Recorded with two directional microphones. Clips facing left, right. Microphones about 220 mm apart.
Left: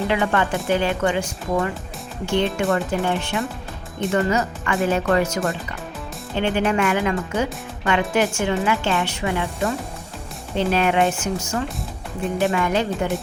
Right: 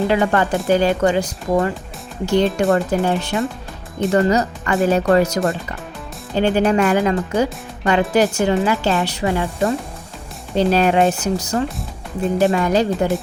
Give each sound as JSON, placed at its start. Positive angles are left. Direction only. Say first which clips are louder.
{"t": 0.1, "sound": "speech", "louder": "right 4 dB", "side_deg": -40}